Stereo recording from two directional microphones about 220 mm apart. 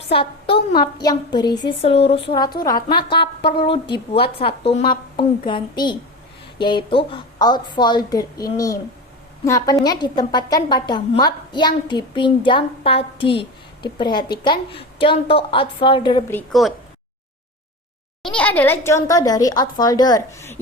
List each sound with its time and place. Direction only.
0.1 s a woman's voice: 25° left (ahead or behind)
3.2 s speech: 45° left (ahead or behind)
4.1 s a woman's voice: 25° left (ahead or behind)
16.3 s a woman's voice: centre (ahead or behind)
18.2 s a child's voice: 5° left (ahead or behind)